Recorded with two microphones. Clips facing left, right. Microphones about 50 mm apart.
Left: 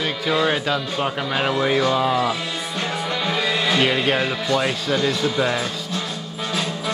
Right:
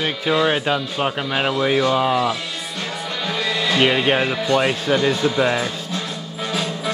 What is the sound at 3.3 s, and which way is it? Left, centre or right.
Music, centre.